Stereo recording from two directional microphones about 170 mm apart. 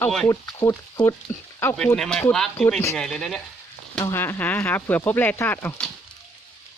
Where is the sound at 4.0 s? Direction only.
15° left (ahead or behind).